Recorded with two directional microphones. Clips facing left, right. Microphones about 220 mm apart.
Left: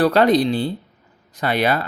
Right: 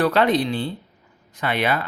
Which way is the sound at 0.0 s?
40° left (ahead or behind).